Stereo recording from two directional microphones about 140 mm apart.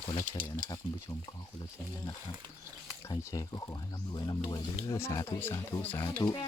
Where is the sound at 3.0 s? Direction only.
25° left (ahead or behind).